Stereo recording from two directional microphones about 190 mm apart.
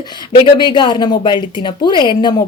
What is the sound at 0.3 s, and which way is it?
Speech, 25° left (ahead or behind).